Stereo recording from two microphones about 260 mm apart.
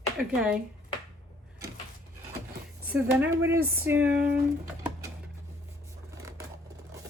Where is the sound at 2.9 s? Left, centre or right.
Centre.